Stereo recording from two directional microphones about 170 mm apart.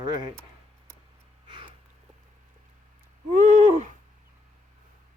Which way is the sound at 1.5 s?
30° right (ahead or behind).